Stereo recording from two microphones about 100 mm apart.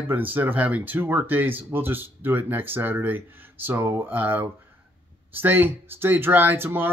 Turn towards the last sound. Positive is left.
turn(degrees=-20)  # may be behind; listen again after turning